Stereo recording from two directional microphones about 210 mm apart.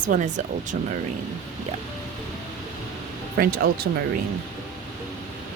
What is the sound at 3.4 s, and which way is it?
Speech, 45° right (ahead or behind).